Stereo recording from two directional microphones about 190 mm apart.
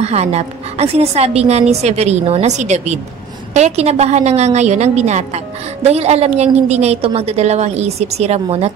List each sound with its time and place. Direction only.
0.0 s a woman's voice: 35° right (ahead or behind)